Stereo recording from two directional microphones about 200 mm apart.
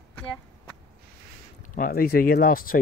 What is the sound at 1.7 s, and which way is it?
Speech, 45° left (ahead or behind).